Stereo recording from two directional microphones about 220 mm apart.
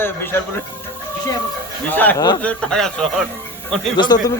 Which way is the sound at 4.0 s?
20° left (ahead or behind).